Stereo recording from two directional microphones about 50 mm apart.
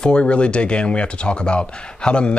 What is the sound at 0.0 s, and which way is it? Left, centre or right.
Speech, left.